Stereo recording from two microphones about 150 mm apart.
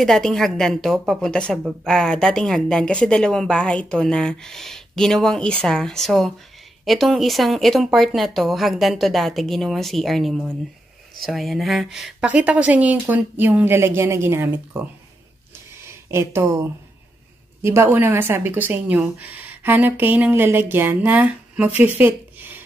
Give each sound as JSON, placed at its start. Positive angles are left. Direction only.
{"t": 0.0, "sound": "a woman's voice", "side_deg": 0}
{"t": 16.1, "sound": "a woman's voice", "side_deg": -15}